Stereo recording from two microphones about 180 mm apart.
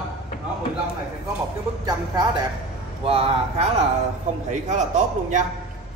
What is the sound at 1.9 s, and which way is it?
Speech, 25° right (ahead or behind).